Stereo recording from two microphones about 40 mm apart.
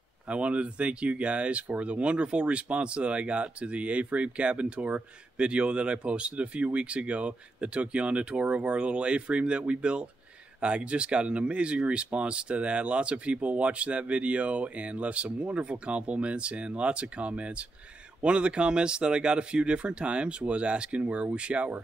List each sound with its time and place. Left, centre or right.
0.3 s speech: right